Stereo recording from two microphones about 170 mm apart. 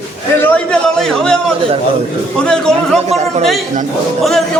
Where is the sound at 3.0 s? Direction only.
40° right (ahead or behind).